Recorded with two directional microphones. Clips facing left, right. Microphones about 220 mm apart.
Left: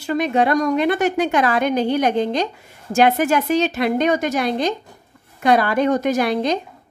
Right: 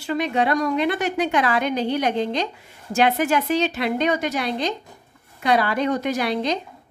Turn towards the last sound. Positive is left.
turn(degrees=50)  # may be behind; listen again after turning